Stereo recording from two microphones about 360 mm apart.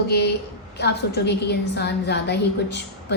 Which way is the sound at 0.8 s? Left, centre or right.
Left.